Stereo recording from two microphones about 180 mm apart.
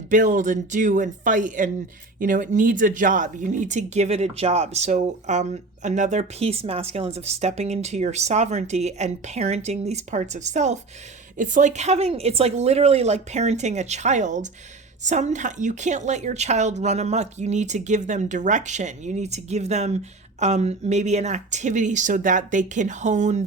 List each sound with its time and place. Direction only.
0.1 s speech: 45° right (ahead or behind)